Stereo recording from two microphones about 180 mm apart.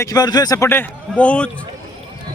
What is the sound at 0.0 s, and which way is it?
A man's voice, 20° left (ahead or behind).